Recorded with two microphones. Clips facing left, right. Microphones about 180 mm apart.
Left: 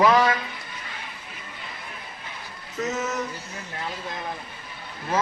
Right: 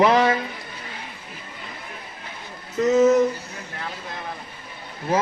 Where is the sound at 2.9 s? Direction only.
30° right (ahead or behind).